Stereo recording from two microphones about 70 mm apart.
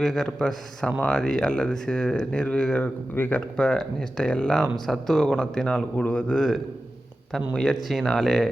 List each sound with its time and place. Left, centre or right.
0.0 s speech: centre
3.2 s speech: left
3.6 s speech: centre
4.6 s speech: centre
7.5 s speech: centre